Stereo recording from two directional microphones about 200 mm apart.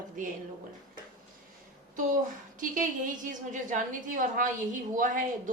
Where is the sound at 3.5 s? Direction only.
40° right (ahead or behind).